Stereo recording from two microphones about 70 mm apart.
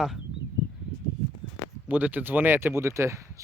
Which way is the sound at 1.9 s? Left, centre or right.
Right.